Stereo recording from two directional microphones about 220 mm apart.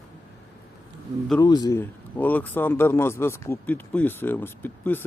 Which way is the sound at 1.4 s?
15° left (ahead or behind).